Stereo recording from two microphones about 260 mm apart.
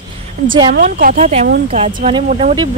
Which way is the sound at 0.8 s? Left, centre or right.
Right.